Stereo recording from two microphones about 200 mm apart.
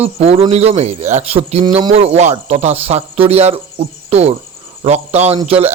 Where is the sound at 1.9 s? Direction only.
30° right (ahead or behind).